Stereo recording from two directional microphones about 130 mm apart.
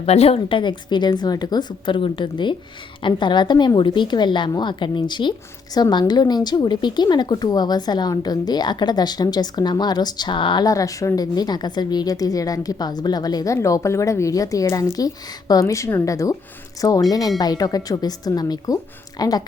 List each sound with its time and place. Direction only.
0.0 s a woman's voice: 50° left (ahead or behind); by 19.3 s 30° left (ahead or behind)